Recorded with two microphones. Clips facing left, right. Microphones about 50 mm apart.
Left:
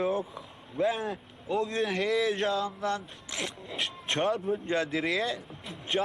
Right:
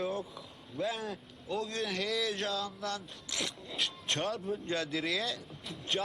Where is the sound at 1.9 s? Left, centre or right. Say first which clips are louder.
Left 6 dB; left.